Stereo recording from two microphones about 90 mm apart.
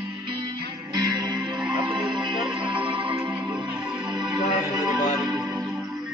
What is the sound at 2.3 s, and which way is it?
Music, 5° right (ahead or behind).